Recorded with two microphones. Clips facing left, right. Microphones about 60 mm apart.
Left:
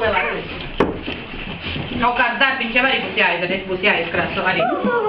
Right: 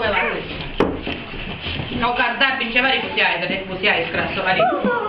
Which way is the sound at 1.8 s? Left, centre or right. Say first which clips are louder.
Left 2 dB; centre.